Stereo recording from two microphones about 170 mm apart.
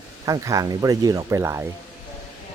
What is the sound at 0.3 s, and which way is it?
Speech, 20° right (ahead or behind).